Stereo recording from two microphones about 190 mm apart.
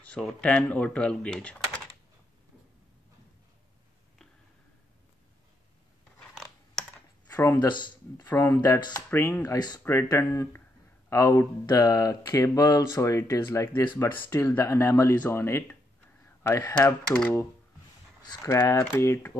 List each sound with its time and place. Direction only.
0.0 s speech: 5° left (ahead or behind)
6.3 s computer keyboard: centre (ahead or behind)
7.2 s speech: 15° left (ahead or behind)
17.1 s speech: 5° left (ahead or behind)
18.3 s speech: 15° left (ahead or behind)